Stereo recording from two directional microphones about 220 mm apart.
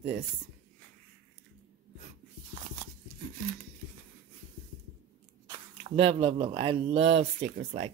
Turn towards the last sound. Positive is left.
turn(degrees=-30)  # may be behind; listen again after turning